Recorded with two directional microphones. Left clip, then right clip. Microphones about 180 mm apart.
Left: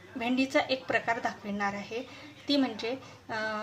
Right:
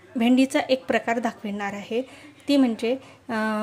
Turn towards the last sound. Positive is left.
turn(degrees=-50)  # may be behind; listen again after turning